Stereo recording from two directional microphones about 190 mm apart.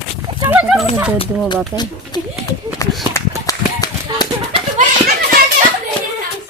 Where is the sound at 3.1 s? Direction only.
20° left (ahead or behind).